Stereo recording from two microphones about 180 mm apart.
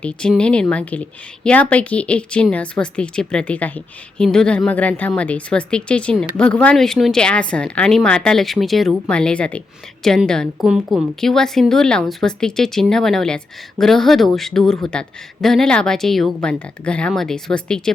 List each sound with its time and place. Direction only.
0.0 s speech: 5° left (ahead or behind)